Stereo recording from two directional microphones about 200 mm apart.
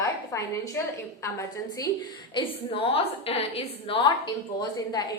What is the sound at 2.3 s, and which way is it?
A woman's voice, 25° left (ahead or behind).